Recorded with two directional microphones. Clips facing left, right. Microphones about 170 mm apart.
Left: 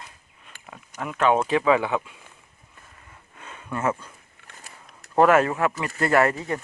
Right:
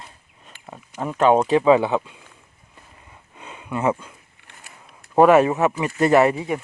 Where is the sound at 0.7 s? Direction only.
25° right (ahead or behind).